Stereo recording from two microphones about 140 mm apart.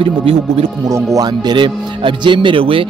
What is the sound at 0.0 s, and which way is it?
Speech, 40° right (ahead or behind).